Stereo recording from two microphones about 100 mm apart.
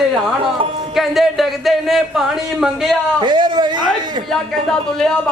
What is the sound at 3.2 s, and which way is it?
Speech, 55° right (ahead or behind).